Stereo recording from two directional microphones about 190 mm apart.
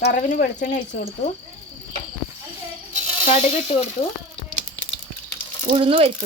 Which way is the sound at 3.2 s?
35° left (ahead or behind).